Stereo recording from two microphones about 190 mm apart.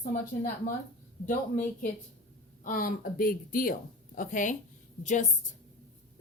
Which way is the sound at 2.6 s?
45° left (ahead or behind).